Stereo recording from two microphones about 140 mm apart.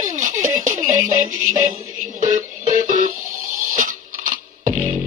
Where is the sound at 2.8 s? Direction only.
60° right (ahead or behind).